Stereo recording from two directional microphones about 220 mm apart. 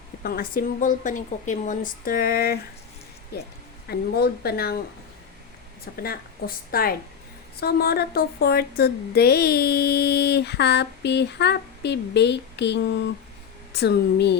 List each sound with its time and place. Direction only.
0.2 s speech: 45° left (ahead or behind)
6.0 s speech: 45° left (ahead or behind)